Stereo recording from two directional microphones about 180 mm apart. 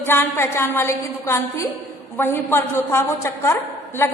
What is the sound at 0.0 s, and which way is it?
A woman's voice, 10° left (ahead or behind).